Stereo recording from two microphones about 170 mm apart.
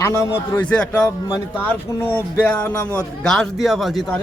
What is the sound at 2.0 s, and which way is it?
Music, 10° left (ahead or behind).